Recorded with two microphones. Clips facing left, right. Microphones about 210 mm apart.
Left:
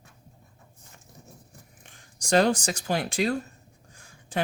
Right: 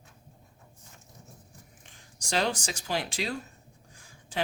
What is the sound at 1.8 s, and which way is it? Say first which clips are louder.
Speech: left 7 dB; 50° left (ahead or behind).